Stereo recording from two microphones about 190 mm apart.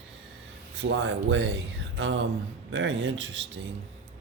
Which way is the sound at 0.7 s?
70° right (ahead or behind).